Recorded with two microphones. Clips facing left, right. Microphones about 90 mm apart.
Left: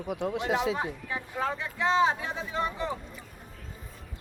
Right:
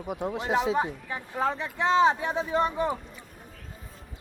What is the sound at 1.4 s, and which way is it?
Speech, 20° right (ahead or behind).